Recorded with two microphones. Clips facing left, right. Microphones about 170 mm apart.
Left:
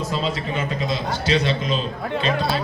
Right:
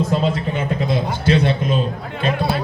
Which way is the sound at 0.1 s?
55° right (ahead or behind).